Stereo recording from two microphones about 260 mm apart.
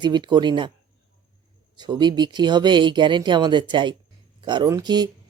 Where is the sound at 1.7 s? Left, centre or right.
Centre.